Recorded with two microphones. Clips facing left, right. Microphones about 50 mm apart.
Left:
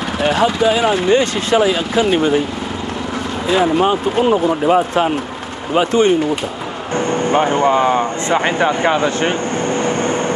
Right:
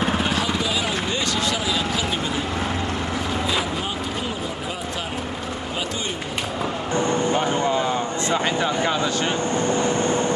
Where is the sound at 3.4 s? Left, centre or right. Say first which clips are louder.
Left 11 dB; left.